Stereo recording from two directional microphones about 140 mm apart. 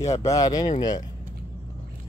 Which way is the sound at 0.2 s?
25° left (ahead or behind).